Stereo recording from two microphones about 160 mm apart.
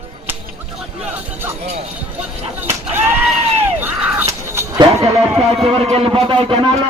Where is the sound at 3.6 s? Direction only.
10° right (ahead or behind).